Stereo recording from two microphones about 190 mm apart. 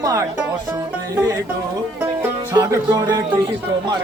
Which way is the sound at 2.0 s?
20° right (ahead or behind).